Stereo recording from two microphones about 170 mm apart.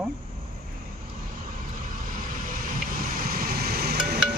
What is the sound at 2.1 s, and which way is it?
Vehicle, 55° right (ahead or behind).